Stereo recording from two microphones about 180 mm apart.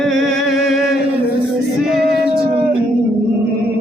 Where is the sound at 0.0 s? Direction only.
Centre (ahead or behind).